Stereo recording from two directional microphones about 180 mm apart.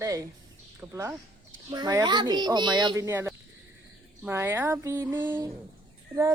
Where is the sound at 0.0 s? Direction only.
20° right (ahead or behind).